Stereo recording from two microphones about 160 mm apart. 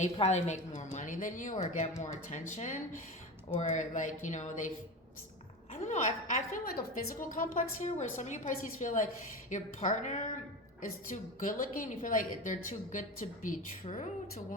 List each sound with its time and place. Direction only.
0.0 s a woman's voice: 45° left (ahead or behind)
5.8 s a woman's voice: 50° left (ahead or behind)